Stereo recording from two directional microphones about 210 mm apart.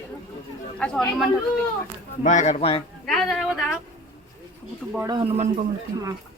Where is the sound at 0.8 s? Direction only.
5° left (ahead or behind).